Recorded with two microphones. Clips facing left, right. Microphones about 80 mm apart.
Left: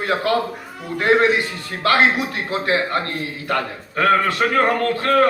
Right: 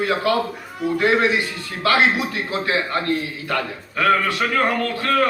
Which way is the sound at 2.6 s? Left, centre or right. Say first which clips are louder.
Left 1 dB; left.